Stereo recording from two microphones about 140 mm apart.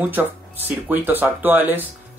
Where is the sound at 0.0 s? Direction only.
15° right (ahead or behind).